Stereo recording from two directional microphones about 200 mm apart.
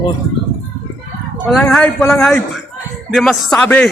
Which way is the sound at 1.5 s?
5° left (ahead or behind).